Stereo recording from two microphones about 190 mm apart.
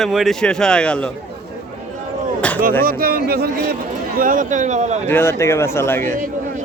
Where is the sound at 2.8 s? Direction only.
50° right (ahead or behind).